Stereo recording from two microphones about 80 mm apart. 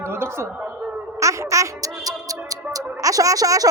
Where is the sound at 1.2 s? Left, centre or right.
Right.